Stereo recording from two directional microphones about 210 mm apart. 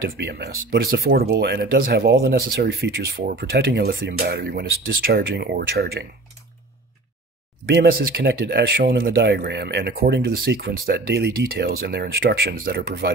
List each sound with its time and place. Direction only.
0.2 s speech: 50° right (ahead or behind)
7.6 s speech: 55° right (ahead or behind)